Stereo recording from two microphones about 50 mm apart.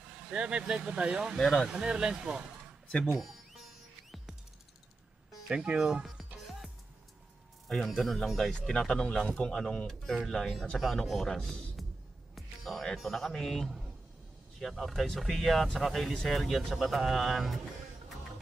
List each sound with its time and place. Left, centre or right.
0.3 s speech: right
3.1 s music: centre
5.5 s speech: centre
6.0 s music: centre
7.6 s speech: centre
9.8 s speech: centre
11.8 s music: centre
12.4 s speech: centre